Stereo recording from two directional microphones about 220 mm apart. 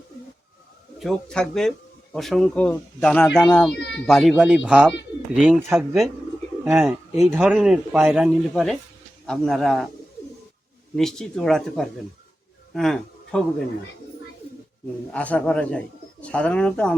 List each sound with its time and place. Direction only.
0.9 s speech: centre (ahead or behind)
3.8 s speech: 50° left (ahead or behind)
4.0 s speech: centre (ahead or behind)
10.9 s a man's voice: centre (ahead or behind)
15.1 s speech: 5° left (ahead or behind)